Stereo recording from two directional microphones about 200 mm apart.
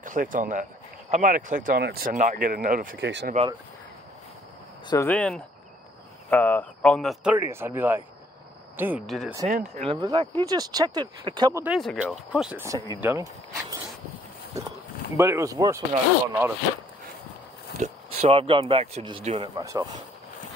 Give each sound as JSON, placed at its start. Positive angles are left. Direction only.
{"t": 0.0, "sound": "speech", "side_deg": -40}
{"t": 3.0, "sound": "speech", "side_deg": -60}
{"t": 4.8, "sound": "speech", "side_deg": 10}
{"t": 9.5, "sound": "speech", "side_deg": -35}
{"t": 9.9, "sound": "speech", "side_deg": -25}
{"t": 11.6, "sound": "speech", "side_deg": 0}
{"t": 13.0, "sound": "a sound", "side_deg": -15}
{"t": 15.1, "sound": "speech", "side_deg": -15}
{"t": 17.7, "sound": "speech", "side_deg": -35}